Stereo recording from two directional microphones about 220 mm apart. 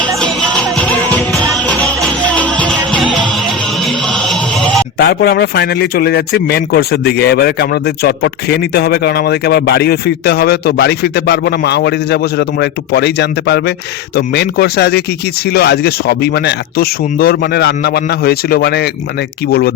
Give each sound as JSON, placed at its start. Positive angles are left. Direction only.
{"t": 0.2, "sound": "music", "side_deg": 5}
{"t": 4.9, "sound": "a man's voice", "side_deg": 45}